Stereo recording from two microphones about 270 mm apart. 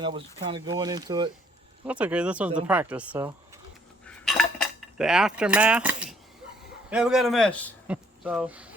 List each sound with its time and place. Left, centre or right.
0.0 s speech: centre
1.9 s a man's voice: centre
4.0 s cutlery: centre
6.9 s a man's voice: centre